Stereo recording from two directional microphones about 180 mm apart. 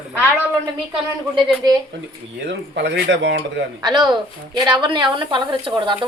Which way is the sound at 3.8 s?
25° right (ahead or behind).